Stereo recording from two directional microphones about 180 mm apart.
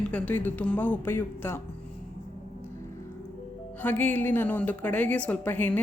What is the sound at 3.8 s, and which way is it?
Speech, 10° left (ahead or behind).